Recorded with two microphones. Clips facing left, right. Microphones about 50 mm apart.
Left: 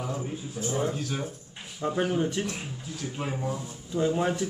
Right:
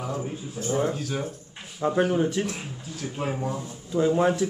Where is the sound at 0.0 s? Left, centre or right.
Centre.